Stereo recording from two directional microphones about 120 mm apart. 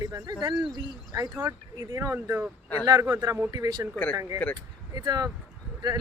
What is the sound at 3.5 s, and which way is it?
Speech, 35° right (ahead or behind).